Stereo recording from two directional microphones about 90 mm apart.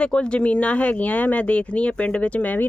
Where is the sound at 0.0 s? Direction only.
10° left (ahead or behind).